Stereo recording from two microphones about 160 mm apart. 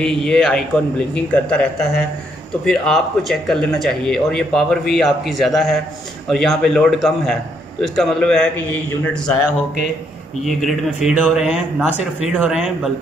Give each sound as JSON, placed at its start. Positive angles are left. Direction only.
{"t": 0.0, "sound": "a man's voice", "side_deg": 5}
{"t": 10.4, "sound": "speech", "side_deg": 0}